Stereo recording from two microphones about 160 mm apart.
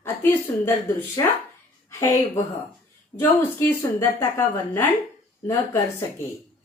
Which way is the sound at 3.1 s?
10° left (ahead or behind).